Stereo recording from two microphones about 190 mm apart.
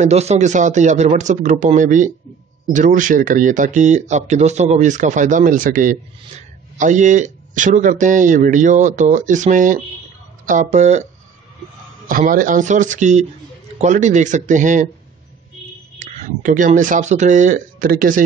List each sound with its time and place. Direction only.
0.0 s speech: 35° right (ahead or behind)
12.1 s speech: 45° right (ahead or behind)
16.0 s speech: 40° right (ahead or behind)